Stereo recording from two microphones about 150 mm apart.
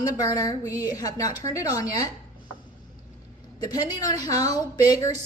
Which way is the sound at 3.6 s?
25° left (ahead or behind).